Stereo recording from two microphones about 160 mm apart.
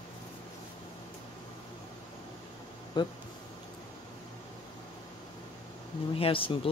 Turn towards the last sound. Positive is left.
turn(degrees=35)  # may be behind; listen again after turning